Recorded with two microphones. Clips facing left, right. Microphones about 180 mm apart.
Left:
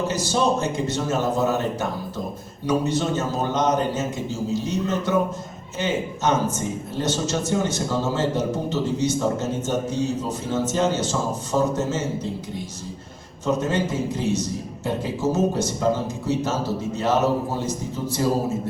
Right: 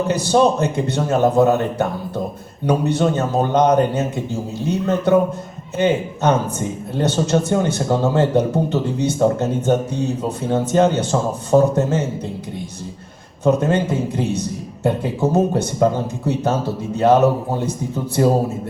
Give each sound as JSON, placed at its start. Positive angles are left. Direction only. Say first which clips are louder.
{"t": 0.1, "sound": "a man's voice", "louder": "right 6 dB", "side_deg": -60}
{"t": 13.4, "sound": "a man's voice", "louder": "right 6 dB", "side_deg": -60}